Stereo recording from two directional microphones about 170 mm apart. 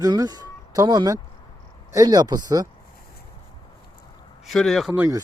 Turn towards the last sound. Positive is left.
turn(degrees=-5)  # may be behind; listen again after turning